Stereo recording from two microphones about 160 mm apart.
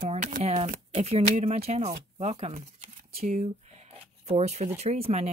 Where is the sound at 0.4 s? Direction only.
40° right (ahead or behind).